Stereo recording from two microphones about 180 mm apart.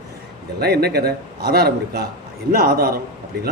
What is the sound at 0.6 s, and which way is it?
A man's voice, 60° right (ahead or behind).